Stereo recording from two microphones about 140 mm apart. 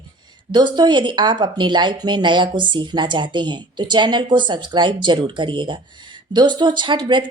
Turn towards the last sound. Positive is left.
turn(degrees=-35)  # may be behind; listen again after turning